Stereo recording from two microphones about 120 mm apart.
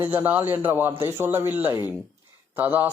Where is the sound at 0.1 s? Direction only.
15° right (ahead or behind).